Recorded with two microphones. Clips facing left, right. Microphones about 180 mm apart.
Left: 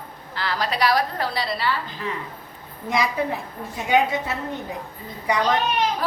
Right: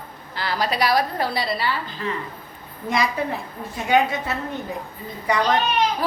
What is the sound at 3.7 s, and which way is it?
Speech, 15° left (ahead or behind).